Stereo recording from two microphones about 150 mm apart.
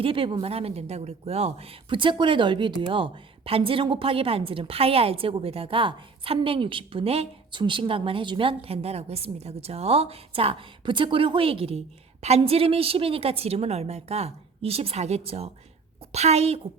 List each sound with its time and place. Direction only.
0.0 s a woman's voice: 35° right (ahead or behind)